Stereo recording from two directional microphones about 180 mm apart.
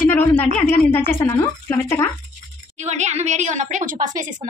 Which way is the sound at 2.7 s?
40° right (ahead or behind).